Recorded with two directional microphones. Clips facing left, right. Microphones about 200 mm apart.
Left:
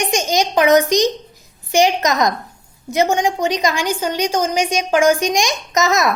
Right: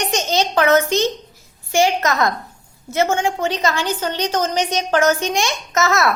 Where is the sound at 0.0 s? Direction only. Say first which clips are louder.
Left 2 dB; 10° left (ahead or behind).